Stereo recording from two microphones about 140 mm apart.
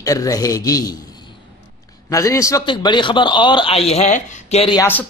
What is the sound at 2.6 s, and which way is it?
Speech, 35° left (ahead or behind).